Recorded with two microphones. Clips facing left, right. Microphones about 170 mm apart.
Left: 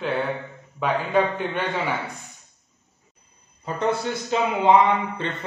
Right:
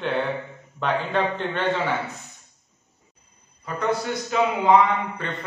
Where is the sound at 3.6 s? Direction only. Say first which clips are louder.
Left 1 dB; 25° left (ahead or behind).